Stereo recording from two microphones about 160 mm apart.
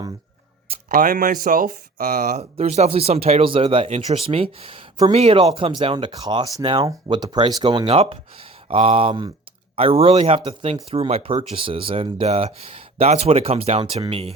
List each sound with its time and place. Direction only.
0.9 s speech: 60° right (ahead or behind)
2.2 s speech: 45° right (ahead or behind)
3.8 s speech: 45° right (ahead or behind)
4.3 s speech: 35° right (ahead or behind)